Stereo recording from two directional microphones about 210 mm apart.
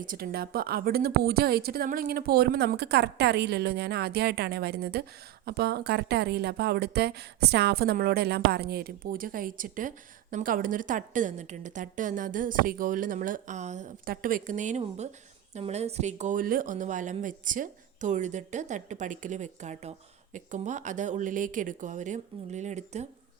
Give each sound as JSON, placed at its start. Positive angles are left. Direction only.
{"t": 0.0, "sound": "a woman's voice", "side_deg": -45}